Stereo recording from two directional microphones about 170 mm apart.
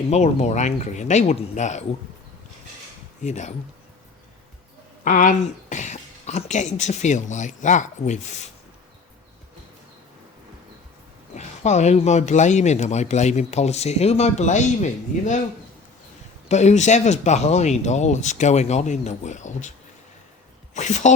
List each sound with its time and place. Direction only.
0.1 s speech: 45° left (ahead or behind)
3.2 s speech: 45° left (ahead or behind)
5.0 s speech: 50° left (ahead or behind)
11.3 s speech: 45° left (ahead or behind)
16.5 s speech: 40° left (ahead or behind)
20.7 s speech: 45° left (ahead or behind)